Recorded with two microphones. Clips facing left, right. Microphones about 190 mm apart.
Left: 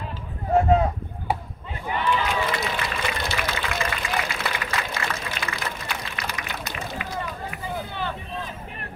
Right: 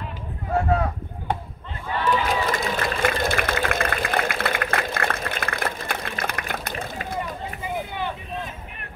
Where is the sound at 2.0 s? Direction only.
50° right (ahead or behind).